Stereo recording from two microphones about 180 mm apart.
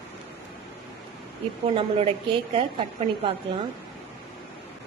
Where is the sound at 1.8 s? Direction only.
30° right (ahead or behind).